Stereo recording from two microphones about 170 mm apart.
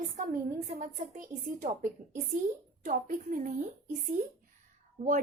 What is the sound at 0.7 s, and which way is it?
A woman's voice, 50° right (ahead or behind).